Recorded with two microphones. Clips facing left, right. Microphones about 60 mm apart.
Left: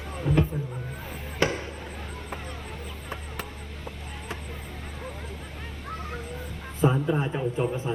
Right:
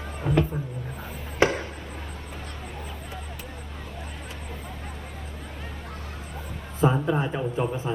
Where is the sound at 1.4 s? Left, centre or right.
Right.